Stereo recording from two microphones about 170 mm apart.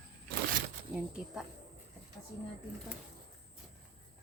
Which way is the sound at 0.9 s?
5° right (ahead or behind).